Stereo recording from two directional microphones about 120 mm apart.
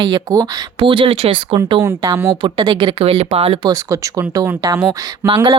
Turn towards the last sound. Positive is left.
turn(degrees=-45)  # may be behind; listen again after turning